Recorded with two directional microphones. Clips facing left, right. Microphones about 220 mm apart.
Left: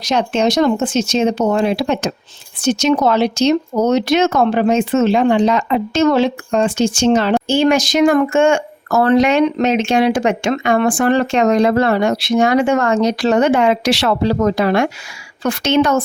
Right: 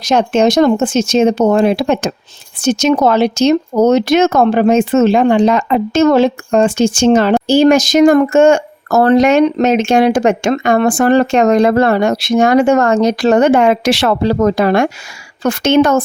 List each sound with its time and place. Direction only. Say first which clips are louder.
0.0 s speech: right 4 dB; 45° right (ahead or behind)